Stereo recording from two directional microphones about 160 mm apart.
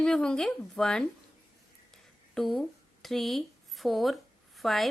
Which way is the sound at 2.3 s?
Centre (ahead or behind).